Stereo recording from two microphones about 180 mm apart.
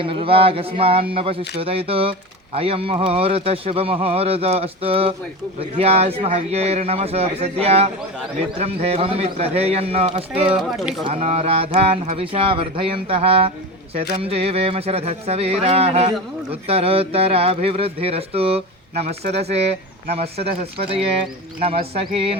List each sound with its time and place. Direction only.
0.0 s speech: 30° right (ahead or behind)
10.5 s speech: 5° right (ahead or behind)
11.0 s speech: 35° right (ahead or behind)